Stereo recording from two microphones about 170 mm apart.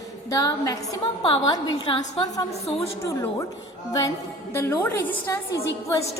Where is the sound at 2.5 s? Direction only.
40° left (ahead or behind).